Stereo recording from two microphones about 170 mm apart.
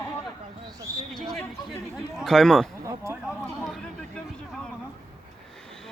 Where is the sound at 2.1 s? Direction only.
Centre (ahead or behind).